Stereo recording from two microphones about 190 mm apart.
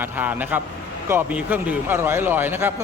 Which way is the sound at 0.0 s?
10° right (ahead or behind).